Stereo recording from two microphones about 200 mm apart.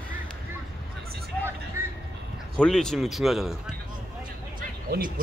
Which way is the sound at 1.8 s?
15° right (ahead or behind).